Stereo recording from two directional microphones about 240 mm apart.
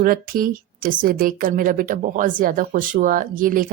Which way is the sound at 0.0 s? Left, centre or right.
Right.